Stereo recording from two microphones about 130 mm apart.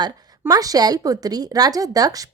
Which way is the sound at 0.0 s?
30° right (ahead or behind).